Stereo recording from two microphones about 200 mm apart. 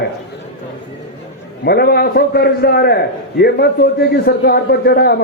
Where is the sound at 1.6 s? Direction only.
55° left (ahead or behind).